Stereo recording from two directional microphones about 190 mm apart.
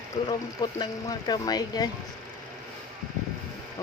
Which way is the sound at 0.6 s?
20° left (ahead or behind).